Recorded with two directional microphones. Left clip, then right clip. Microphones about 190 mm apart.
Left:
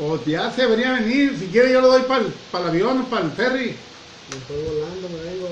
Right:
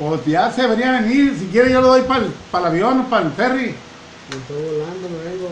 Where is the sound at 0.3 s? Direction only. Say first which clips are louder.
Right 4 dB; 45° right (ahead or behind).